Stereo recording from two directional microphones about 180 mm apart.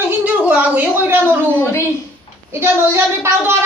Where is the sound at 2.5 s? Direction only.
15° right (ahead or behind).